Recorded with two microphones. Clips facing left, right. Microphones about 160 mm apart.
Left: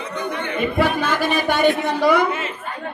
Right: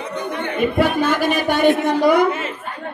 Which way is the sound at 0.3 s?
45° right (ahead or behind).